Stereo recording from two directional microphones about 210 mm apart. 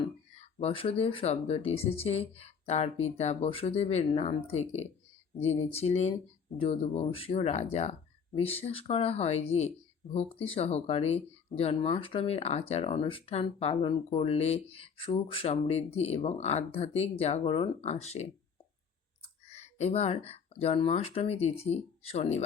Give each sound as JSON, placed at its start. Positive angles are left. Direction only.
{"t": 0.3, "sound": "speech", "side_deg": 25}
{"t": 19.5, "sound": "speech", "side_deg": 30}